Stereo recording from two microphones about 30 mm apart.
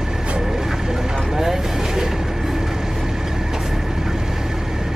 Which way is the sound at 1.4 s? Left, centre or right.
Centre.